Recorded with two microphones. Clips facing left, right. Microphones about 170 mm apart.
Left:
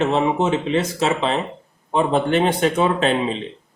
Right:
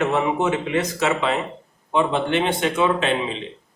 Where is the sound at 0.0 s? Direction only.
25° left (ahead or behind).